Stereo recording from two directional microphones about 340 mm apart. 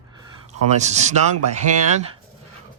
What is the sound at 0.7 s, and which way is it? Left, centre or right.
Speech, centre.